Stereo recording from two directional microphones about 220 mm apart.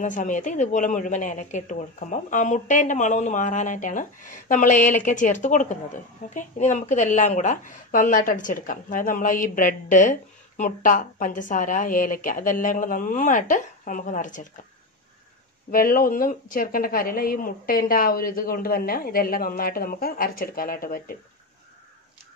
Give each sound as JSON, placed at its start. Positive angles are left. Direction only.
{"t": 0.0, "sound": "speech", "side_deg": 35}
{"t": 15.7, "sound": "speech", "side_deg": 40}